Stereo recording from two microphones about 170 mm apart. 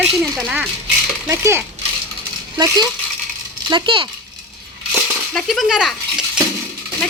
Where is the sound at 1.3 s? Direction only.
15° right (ahead or behind).